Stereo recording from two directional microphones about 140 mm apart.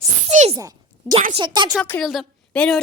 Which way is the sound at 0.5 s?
25° right (ahead or behind).